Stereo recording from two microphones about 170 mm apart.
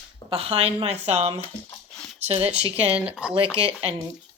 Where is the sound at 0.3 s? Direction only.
35° right (ahead or behind).